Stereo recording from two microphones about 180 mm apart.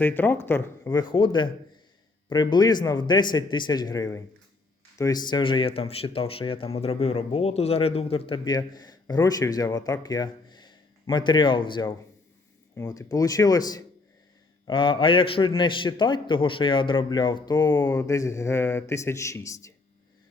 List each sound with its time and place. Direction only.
0.0 s speech: 10° left (ahead or behind)